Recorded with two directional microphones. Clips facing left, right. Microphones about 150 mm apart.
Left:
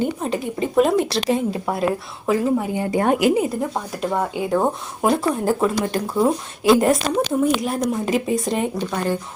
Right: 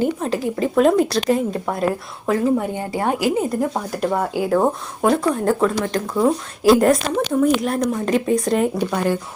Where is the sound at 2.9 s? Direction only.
20° left (ahead or behind).